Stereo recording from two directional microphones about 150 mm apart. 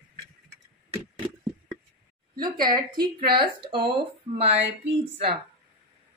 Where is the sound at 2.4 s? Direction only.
30° right (ahead or behind).